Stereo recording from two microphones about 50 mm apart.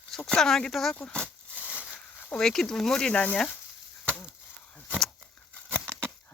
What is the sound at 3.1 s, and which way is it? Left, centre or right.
Speech, left.